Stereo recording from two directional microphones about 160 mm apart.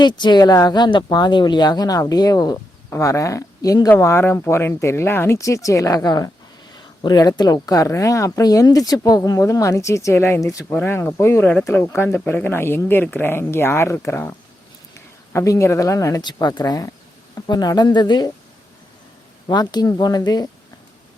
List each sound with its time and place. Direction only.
0.0 s speech: 25° left (ahead or behind)
19.5 s speech: 25° left (ahead or behind)